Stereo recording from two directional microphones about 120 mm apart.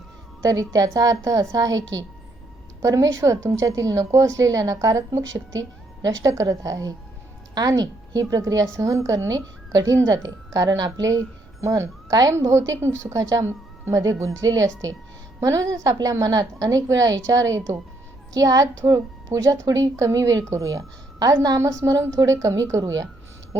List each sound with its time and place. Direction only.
0.4 s a woman's voice: 30° right (ahead or behind)
15.4 s a woman's voice: 25° right (ahead or behind)